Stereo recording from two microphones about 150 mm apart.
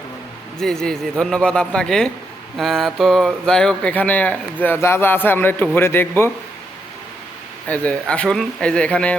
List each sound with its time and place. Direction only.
0.6 s speech: 5° left (ahead or behind)
7.7 s speech: 10° left (ahead or behind)